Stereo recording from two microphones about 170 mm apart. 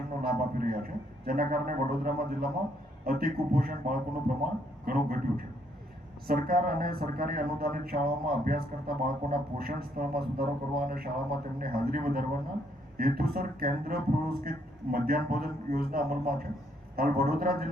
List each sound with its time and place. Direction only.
0.2 s speech: 60° right (ahead or behind)